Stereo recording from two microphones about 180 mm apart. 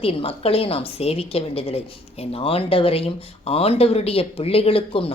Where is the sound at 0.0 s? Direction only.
30° left (ahead or behind).